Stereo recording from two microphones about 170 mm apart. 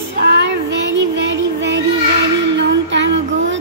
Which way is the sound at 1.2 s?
90° right.